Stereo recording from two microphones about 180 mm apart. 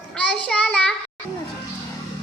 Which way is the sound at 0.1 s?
5° left (ahead or behind).